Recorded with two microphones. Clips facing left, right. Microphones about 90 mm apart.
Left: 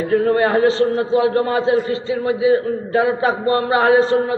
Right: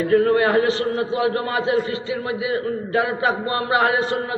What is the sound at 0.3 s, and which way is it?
A man's voice, 30° left (ahead or behind).